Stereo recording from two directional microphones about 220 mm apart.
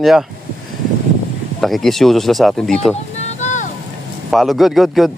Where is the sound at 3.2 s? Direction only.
30° left (ahead or behind).